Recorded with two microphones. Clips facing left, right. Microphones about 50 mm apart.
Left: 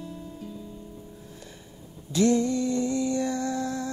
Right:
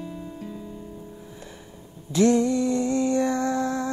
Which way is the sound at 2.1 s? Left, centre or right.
Right.